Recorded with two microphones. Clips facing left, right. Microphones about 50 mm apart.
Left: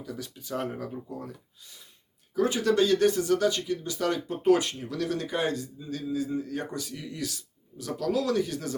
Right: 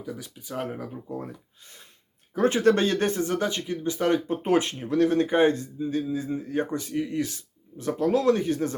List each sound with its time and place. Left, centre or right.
0.0 s speech: centre
1.0 s speech: right